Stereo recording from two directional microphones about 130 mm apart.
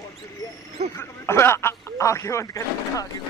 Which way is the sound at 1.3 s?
20° left (ahead or behind).